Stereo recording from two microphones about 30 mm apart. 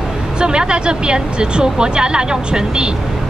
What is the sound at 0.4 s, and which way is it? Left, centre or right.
A woman's voice, right.